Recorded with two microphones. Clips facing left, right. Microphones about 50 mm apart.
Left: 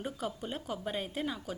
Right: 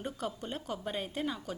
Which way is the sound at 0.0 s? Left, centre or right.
Centre.